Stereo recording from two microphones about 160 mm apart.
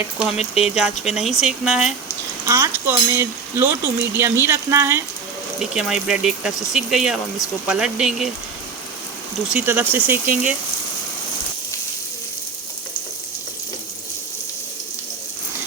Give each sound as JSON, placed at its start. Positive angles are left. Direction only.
{"t": 0.5, "sound": "speech", "side_deg": 0}
{"t": 2.5, "sound": "speech", "side_deg": -15}
{"t": 5.7, "sound": "speech", "side_deg": -5}
{"t": 9.5, "sound": "speech", "side_deg": -10}